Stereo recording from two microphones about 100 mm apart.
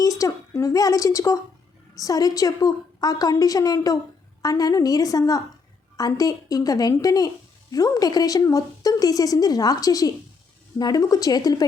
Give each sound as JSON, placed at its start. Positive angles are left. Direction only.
{"t": 0.0, "sound": "a woman's voice", "side_deg": 35}